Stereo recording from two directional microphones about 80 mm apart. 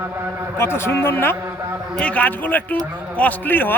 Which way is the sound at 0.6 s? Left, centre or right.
Left.